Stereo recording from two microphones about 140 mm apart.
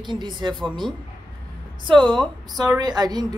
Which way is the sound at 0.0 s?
35° right (ahead or behind).